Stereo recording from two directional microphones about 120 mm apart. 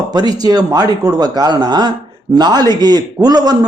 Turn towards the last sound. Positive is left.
turn(degrees=-35)  # may be behind; listen again after turning